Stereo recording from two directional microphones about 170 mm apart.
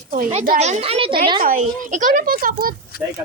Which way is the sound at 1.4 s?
50° right (ahead or behind).